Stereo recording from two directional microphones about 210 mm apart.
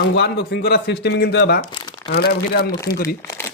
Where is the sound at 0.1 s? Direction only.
55° left (ahead or behind).